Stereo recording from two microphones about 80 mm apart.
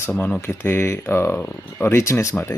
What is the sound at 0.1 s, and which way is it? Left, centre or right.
Speech, left.